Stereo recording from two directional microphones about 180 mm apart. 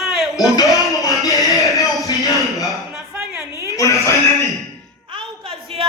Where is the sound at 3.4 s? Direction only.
15° right (ahead or behind).